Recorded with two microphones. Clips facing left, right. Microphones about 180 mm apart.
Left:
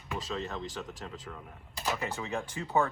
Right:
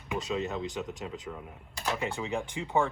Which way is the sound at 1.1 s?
15° right (ahead or behind).